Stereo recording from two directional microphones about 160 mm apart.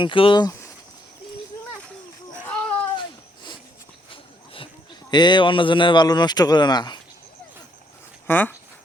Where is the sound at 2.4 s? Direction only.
5° left (ahead or behind).